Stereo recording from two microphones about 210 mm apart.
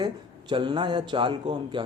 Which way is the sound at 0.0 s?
20° right (ahead or behind).